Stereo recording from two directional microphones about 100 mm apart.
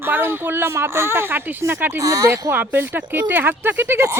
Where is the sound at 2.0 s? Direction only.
35° right (ahead or behind).